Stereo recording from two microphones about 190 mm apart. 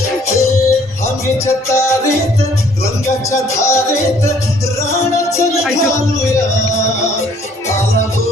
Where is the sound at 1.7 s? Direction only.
15° left (ahead or behind).